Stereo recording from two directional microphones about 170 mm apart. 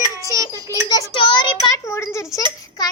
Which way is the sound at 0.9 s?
25° left (ahead or behind).